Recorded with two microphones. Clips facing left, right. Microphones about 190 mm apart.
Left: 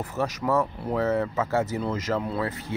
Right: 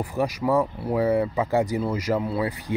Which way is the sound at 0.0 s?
10° right (ahead or behind).